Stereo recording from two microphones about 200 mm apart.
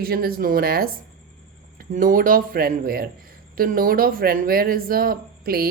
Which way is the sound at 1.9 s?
45° right (ahead or behind).